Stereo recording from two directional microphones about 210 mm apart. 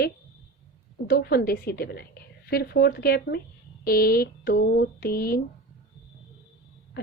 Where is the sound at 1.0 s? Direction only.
45° left (ahead or behind).